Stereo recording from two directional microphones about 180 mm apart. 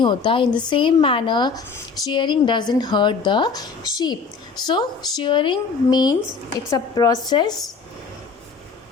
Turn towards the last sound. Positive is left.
turn(degrees=20)  # may be behind; listen again after turning